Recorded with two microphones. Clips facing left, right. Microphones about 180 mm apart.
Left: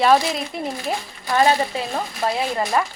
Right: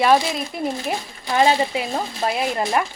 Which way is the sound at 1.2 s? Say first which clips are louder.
Even; 20° right (ahead or behind).